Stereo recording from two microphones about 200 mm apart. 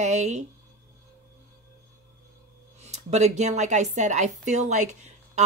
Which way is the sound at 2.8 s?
35° right (ahead or behind).